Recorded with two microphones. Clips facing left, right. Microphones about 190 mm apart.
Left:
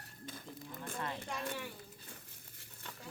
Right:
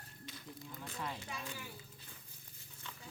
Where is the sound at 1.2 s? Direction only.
65° left (ahead or behind).